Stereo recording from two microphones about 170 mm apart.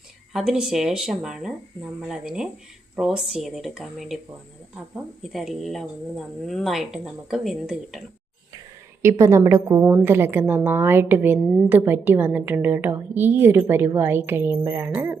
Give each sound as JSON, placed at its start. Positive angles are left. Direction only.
{"t": 0.3, "sound": "speech", "side_deg": -5}
{"t": 5.2, "sound": "speech", "side_deg": 0}
{"t": 9.0, "sound": "a woman's voice", "side_deg": -15}